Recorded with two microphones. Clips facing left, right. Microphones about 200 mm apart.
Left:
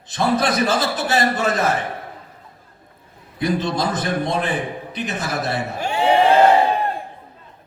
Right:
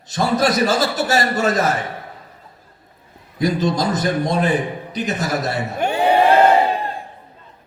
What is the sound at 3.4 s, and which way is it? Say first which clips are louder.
A man's voice: right 2 dB; 40° right (ahead or behind).